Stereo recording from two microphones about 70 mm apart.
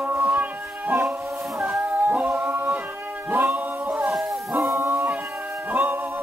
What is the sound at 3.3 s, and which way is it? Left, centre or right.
Dog, right.